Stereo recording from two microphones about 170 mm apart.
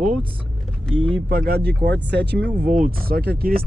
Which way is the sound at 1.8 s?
85° right.